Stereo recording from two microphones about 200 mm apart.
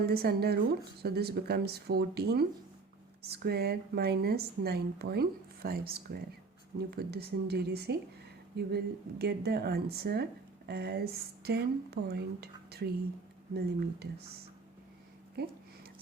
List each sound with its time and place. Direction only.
0.0 s speech: 50° right (ahead or behind)